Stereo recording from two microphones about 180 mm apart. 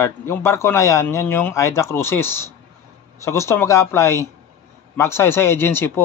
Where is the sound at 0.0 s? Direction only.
15° left (ahead or behind).